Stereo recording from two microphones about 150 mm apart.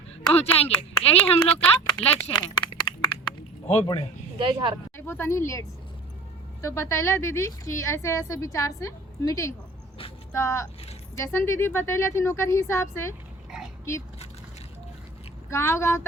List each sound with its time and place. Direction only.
0.3 s speech: 40° left (ahead or behind)
1.5 s speech: 10° left (ahead or behind)
2.1 s a sound: 30° left (ahead or behind)
4.4 s speech: 35° right (ahead or behind)
4.9 s a woman's voice: 15° left (ahead or behind)
15.4 s speech: 15° left (ahead or behind)